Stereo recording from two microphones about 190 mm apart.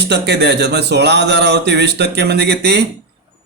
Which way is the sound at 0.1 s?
60° right (ahead or behind).